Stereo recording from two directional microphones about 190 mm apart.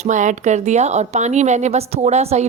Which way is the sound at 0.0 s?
40° right (ahead or behind).